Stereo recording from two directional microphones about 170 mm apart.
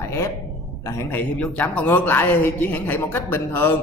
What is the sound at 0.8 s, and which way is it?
A man's voice, 15° left (ahead or behind).